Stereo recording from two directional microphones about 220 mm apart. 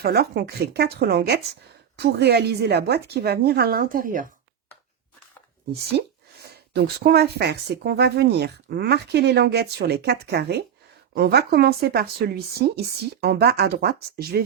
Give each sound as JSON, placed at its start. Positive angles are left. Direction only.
{"t": 0.0, "sound": "speech", "side_deg": -45}
{"t": 5.9, "sound": "speech", "side_deg": -50}